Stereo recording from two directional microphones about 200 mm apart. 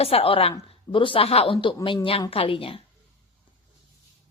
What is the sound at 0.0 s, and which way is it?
A woman's voice, 30° left (ahead or behind).